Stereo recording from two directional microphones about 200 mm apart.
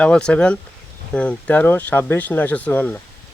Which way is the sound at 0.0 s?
5° left (ahead or behind).